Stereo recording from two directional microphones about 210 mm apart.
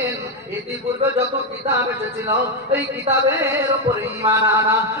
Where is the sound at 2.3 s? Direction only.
15° right (ahead or behind).